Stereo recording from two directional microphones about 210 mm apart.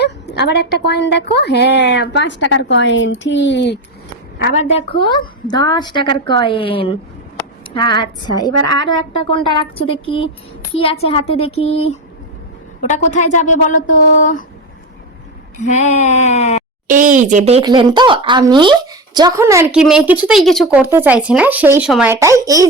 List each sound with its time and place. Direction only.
0.0 s a woman's voice: 55° left (ahead or behind)
4.5 s a woman's voice: 30° left (ahead or behind)
12.9 s a sound: 35° left (ahead or behind)
15.6 s a sound: 35° left (ahead or behind)
16.8 s speech: 40° right (ahead or behind); by 19.6 s 15° right (ahead or behind)
19.7 s speech: 5° right (ahead or behind)
20.8 s speech: 10° right (ahead or behind)